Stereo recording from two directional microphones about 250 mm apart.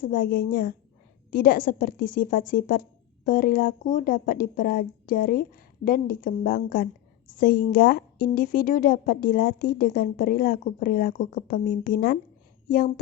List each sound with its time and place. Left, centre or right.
0.0 s a woman's voice: left